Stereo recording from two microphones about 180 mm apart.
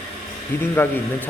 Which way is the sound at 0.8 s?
10° left (ahead or behind).